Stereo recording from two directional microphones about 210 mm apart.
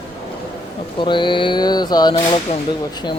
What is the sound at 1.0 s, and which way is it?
Speech, 20° left (ahead or behind).